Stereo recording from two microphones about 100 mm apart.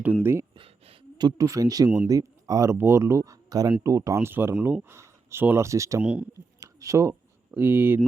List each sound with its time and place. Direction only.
0.0 s speech: 20° right (ahead or behind)
0.5 s a sound: 65° right (ahead or behind)
1.2 s speech: 35° right (ahead or behind)
6.0 s speech: 10° right (ahead or behind)
6.6 s a sound: 30° right (ahead or behind)
7.5 s speech: 20° right (ahead or behind)